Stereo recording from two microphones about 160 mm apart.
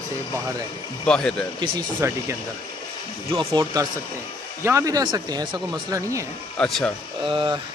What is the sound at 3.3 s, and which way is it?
Speech, 25° right (ahead or behind).